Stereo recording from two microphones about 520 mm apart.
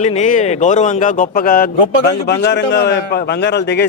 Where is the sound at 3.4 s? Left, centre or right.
Centre.